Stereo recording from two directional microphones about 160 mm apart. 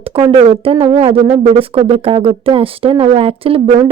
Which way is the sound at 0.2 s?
35° right (ahead or behind).